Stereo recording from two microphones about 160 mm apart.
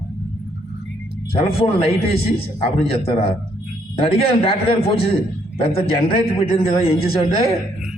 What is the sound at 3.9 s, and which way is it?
A man's voice, 35° left (ahead or behind).